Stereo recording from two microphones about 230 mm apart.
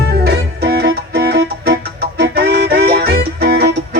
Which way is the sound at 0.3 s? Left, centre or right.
Right.